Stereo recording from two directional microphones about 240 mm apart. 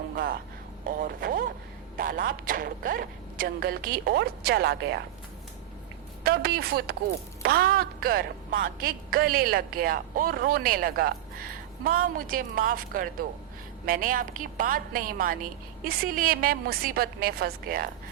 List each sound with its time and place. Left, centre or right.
0.9 s a woman's voice: right
6.2 s a woman's voice: right